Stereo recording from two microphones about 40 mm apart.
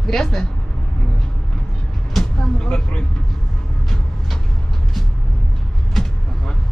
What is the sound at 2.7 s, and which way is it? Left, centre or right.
Speech, left.